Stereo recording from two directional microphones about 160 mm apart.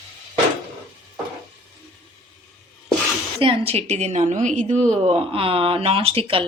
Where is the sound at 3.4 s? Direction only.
35° right (ahead or behind).